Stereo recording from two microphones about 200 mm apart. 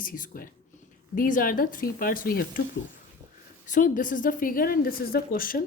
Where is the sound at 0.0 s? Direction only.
45° left (ahead or behind).